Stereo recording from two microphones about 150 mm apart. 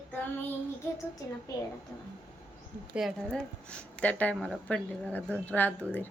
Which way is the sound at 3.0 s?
Centre (ahead or behind).